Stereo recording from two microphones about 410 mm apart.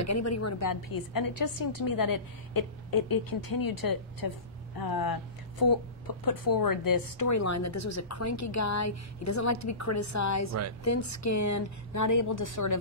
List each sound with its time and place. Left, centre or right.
0.0 s a woman's voice: left
1.7 s a woman's voice: left
2.0 s a woman's voice: left